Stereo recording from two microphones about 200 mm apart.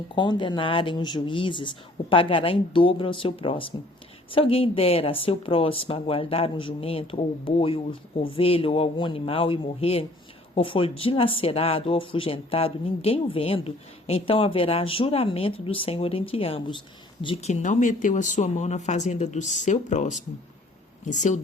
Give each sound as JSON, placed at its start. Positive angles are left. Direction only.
{"t": 0.2, "sound": "speech", "side_deg": 25}